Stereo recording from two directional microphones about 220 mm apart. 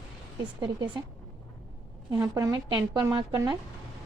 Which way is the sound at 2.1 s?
15° right (ahead or behind).